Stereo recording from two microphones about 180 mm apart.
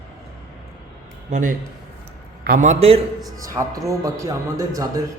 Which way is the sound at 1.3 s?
45° right (ahead or behind).